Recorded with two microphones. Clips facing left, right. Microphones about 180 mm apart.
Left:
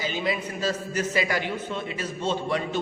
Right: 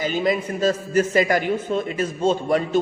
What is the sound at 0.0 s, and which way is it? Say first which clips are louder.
A man's voice: right 6 dB; 45° right (ahead or behind).